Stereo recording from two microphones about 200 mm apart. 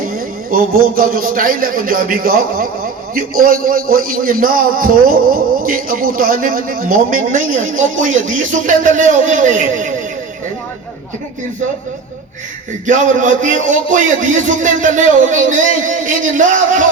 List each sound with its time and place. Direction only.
0.0 s a man's voice: 45° right (ahead or behind)
12.8 s a man's voice: 40° right (ahead or behind)